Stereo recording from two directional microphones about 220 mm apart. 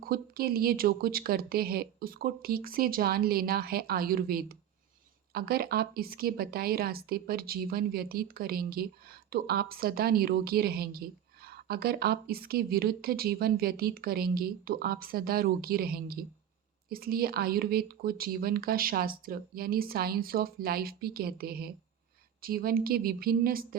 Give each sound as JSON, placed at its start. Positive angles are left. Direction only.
{"t": 0.0, "sound": "a woman's voice", "side_deg": -45}